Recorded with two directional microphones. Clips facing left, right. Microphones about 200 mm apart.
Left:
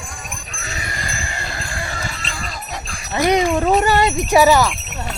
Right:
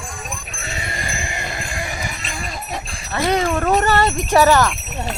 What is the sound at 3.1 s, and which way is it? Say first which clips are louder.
Speech: left 3 dB; 20° left (ahead or behind).